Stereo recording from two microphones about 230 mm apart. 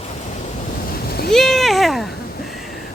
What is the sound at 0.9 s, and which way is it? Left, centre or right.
Boat, left.